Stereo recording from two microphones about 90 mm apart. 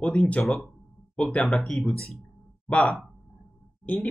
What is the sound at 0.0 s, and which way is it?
Speech, 15° left (ahead or behind).